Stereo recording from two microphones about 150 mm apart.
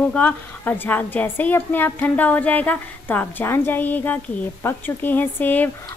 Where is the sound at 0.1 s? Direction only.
10° left (ahead or behind).